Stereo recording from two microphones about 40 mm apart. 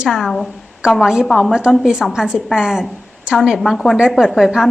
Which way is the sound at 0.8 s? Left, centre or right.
Right.